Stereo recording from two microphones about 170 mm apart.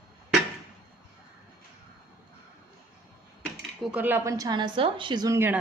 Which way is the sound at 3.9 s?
10° right (ahead or behind).